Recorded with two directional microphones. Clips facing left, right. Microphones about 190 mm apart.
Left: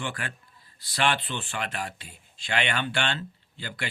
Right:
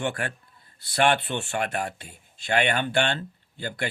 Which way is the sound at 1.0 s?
60° right (ahead or behind).